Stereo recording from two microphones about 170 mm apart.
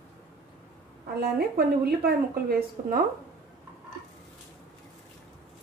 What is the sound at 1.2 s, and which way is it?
Speech, 60° right (ahead or behind).